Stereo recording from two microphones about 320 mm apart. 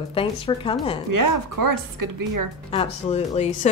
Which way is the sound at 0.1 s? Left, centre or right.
Centre.